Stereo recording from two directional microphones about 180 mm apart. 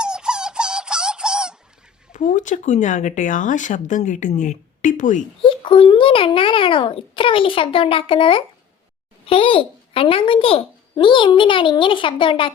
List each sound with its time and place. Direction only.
0.0 s squeak: 5° right (ahead or behind)
2.1 s speech: 45° left (ahead or behind)
5.4 s a child's voice: 30° left (ahead or behind)